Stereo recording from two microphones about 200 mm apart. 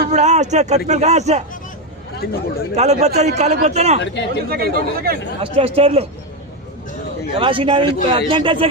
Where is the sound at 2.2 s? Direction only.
50° left (ahead or behind).